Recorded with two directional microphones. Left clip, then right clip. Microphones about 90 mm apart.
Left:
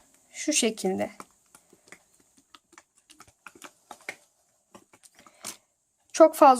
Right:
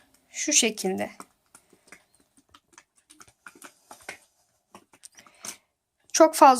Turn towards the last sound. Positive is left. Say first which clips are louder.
# right 1 dB
turn(degrees=5)  # may be behind; listen again after turning